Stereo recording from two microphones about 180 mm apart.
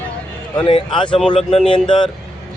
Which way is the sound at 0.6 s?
30° left (ahead or behind).